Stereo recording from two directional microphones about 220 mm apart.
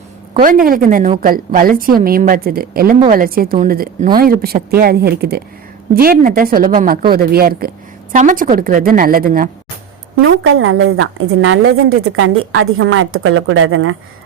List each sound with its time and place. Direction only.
0.3 s a woman's voice: 40° right (ahead or behind)
10.2 s a woman's voice: 65° right (ahead or behind)